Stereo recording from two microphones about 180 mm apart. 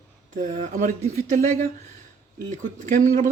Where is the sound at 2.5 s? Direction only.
45° right (ahead or behind).